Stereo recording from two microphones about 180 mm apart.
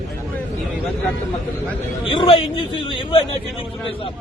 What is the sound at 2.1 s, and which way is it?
A man's voice, 30° left (ahead or behind).